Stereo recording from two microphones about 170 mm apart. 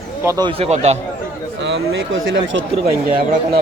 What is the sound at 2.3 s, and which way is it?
Speech, 90° right.